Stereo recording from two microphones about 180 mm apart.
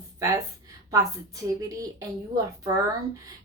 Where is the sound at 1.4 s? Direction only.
20° right (ahead or behind).